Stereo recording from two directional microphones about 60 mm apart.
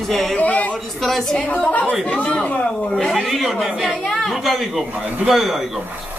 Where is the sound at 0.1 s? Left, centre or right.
Centre.